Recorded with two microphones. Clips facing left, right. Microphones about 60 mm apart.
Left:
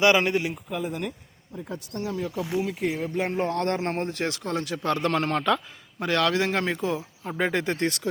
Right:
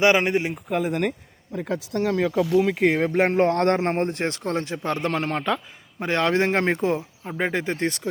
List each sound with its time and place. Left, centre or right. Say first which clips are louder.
0.0 s speech: right 2 dB; right
0.7 s speech: right 10 dB; right
1.5 s speech: right 8 dB; right
2.6 s speech: right 7 dB; right
4.9 s a man's voice: left 1 dB; centre
6.0 s speech: right 2 dB; right
7.3 s speech: even; centre